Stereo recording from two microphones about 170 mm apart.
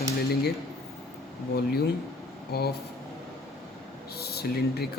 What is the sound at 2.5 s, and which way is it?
Speech, 70° left (ahead or behind).